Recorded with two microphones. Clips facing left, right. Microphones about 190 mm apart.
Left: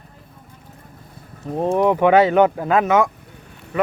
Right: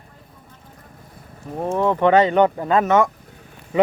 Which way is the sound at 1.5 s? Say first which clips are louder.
Left 3 dB; 20° left (ahead or behind).